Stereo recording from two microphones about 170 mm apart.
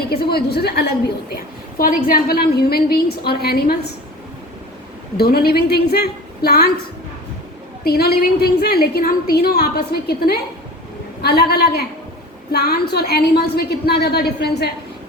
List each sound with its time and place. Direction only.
0.1 s a woman's voice: 65° left (ahead or behind)
1.8 s a woman's voice: 55° left (ahead or behind)
5.1 s a woman's voice: 65° left (ahead or behind)
7.9 s a woman's voice: 65° left (ahead or behind)